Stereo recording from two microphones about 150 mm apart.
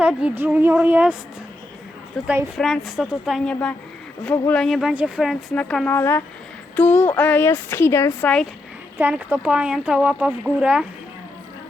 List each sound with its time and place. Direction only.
0.0 s speech: 10° right (ahead or behind)
2.2 s speech: 15° right (ahead or behind)
2.6 s speech: 5° left (ahead or behind)
9.0 s speech: 10° right (ahead or behind)